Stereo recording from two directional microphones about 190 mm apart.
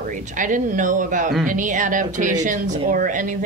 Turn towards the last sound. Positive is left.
turn(degrees=-45)  # may be behind; listen again after turning